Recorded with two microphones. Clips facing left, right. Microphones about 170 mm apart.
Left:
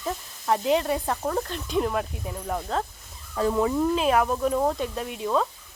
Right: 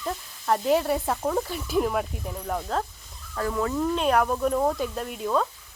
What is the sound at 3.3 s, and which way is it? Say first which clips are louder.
Speech: left 3 dB; 20° left (ahead or behind).